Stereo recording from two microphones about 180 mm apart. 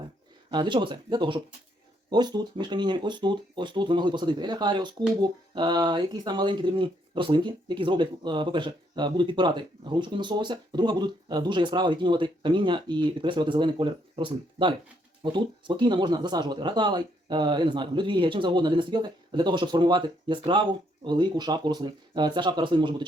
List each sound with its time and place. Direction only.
0.5 s speech: 25° right (ahead or behind)